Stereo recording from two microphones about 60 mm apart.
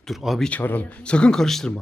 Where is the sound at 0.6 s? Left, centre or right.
Left.